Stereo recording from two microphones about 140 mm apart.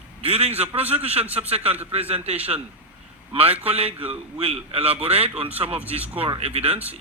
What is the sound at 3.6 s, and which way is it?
Speech, 45° right (ahead or behind).